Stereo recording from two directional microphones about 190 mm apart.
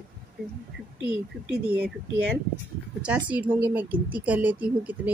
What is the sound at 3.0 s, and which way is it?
Speech, 5° right (ahead or behind).